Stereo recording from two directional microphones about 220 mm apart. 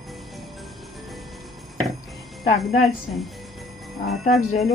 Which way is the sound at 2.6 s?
Centre (ahead or behind).